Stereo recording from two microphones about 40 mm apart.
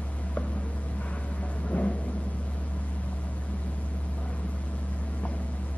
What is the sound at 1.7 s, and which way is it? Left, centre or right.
Vehicle, left.